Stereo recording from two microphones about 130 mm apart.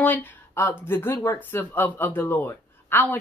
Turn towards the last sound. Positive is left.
turn(degrees=15)  # may be behind; listen again after turning